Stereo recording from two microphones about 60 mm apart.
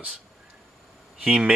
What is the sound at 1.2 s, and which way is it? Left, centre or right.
Speech, centre.